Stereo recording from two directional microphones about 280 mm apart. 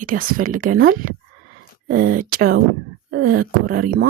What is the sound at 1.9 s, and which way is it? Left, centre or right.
Speech, right.